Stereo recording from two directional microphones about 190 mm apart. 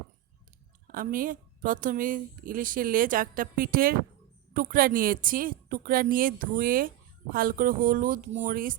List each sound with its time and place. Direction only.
0.9 s a woman's voice: 45° right (ahead or behind)